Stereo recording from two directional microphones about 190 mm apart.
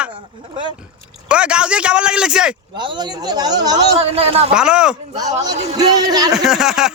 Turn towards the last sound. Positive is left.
turn(degrees=-5)  # may be behind; listen again after turning